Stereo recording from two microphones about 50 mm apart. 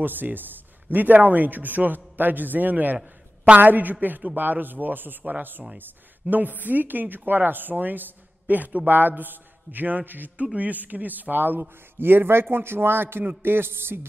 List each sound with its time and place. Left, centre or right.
0.0 s a man's voice: right